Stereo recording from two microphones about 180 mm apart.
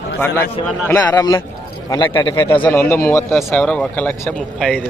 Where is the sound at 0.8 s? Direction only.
20° left (ahead or behind).